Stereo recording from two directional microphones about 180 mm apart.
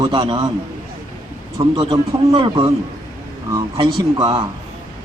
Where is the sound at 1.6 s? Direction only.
25° right (ahead or behind).